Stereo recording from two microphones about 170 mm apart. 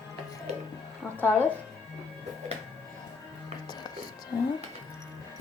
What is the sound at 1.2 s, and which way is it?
Speech, 10° left (ahead or behind).